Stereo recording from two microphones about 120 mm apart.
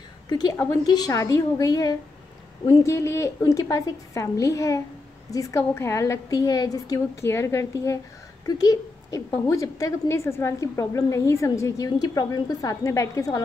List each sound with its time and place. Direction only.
0.3 s a woman's voice: 35° left (ahead or behind)